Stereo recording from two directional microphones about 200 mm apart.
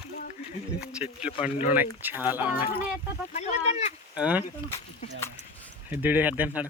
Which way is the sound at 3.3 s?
35° left (ahead or behind).